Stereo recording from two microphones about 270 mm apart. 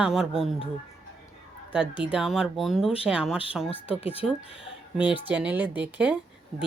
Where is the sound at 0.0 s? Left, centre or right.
Centre.